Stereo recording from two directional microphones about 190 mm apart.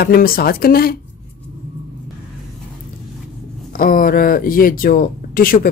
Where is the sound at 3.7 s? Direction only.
50° left (ahead or behind).